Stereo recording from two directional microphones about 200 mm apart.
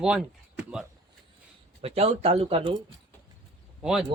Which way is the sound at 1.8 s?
30° right (ahead or behind).